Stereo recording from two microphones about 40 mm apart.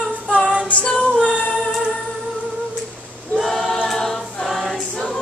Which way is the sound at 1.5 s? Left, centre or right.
Centre.